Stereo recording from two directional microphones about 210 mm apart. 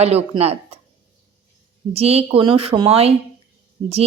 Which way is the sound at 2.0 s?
30° right (ahead or behind).